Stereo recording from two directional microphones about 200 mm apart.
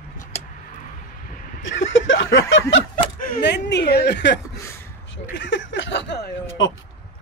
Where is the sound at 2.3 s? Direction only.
70° left (ahead or behind).